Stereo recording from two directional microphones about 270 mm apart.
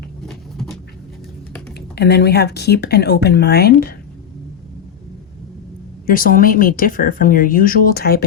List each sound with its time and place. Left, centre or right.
0.3 s a sound: centre
2.0 s speech: left
6.1 s speech: left